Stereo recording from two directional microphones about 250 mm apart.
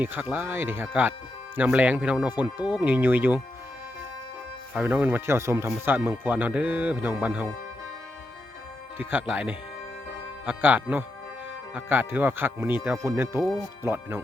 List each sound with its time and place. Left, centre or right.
0.0 s speech: centre
4.7 s speech: centre
9.0 s speech: centre